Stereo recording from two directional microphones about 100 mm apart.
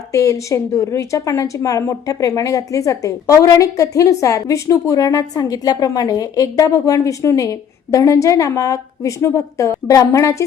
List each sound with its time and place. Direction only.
0.1 s speech: 35° left (ahead or behind)